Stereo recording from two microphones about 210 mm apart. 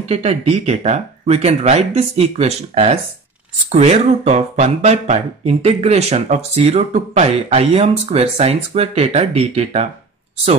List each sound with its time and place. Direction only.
0.1 s speech: 30° right (ahead or behind)